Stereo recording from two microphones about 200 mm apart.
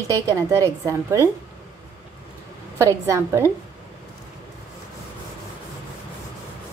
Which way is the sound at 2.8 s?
15° right (ahead or behind).